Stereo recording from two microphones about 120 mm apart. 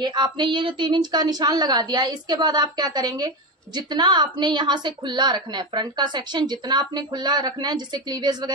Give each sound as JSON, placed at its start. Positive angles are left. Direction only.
{"t": 0.0, "sound": "a woman's voice", "side_deg": -40}